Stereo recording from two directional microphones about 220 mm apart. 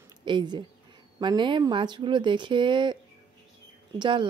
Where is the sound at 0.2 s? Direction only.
20° right (ahead or behind).